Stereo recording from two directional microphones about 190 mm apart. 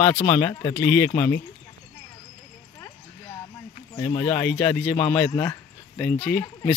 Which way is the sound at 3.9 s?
10° left (ahead or behind).